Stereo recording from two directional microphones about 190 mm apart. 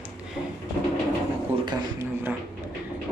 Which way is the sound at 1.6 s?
25° right (ahead or behind).